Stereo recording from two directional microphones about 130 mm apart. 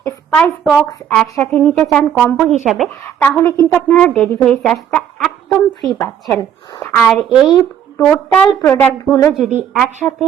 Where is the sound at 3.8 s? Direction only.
10° left (ahead or behind).